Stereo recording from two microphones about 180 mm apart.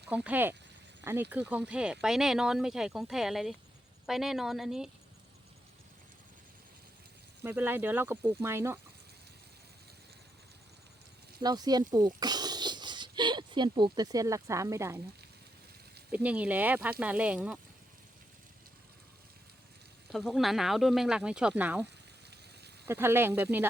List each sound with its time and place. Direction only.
0.1 s speech: 10° right (ahead or behind)
7.4 s speech: 10° right (ahead or behind)
11.4 s speech: 20° right (ahead or behind)
16.1 s speech: 5° right (ahead or behind)
20.1 s speech: centre (ahead or behind)
22.9 s speech: 15° right (ahead or behind)